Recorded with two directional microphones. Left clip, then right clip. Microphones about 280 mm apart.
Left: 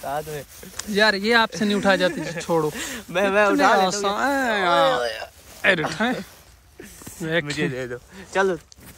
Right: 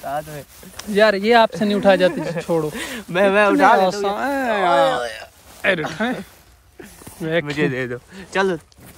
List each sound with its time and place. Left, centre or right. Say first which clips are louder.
0.0 s speech: right 2 dB; centre
2.1 s speech: right 5 dB; centre
2.4 s speech: even; centre
2.7 s speech: right 3 dB; right
3.7 s speech: right 3 dB; centre
6.8 s a sound: right 3 dB; centre
7.5 s speech: right 5 dB; centre